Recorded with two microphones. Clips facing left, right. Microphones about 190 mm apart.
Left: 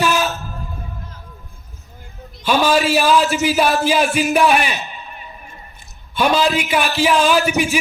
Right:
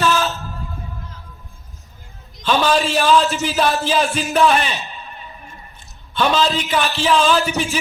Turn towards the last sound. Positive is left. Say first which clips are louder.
# left 2 dB
turn(degrees=10)  # may be behind; listen again after turning